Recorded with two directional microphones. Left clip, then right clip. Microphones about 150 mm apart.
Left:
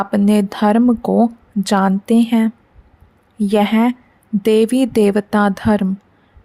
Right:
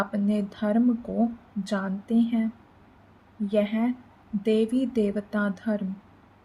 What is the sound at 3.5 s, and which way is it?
A woman's voice, 90° left.